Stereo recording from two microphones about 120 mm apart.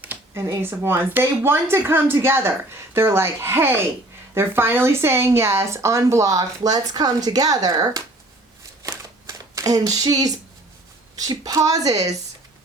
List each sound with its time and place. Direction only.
0.0 s speech: 15° right (ahead or behind)
8.8 s a sound: 25° right (ahead or behind)
11.3 s a woman's voice: 30° right (ahead or behind)